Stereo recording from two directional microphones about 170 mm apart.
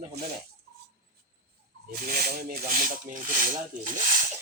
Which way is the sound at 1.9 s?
60° right (ahead or behind).